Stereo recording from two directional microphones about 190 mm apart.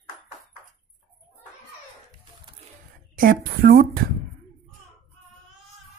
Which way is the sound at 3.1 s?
50° right (ahead or behind).